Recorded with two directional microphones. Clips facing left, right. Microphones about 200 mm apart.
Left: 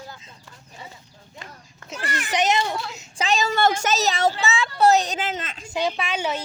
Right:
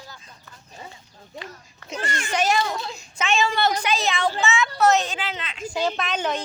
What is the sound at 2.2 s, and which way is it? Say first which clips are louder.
Speech: left 1 dB; 20° left (ahead or behind).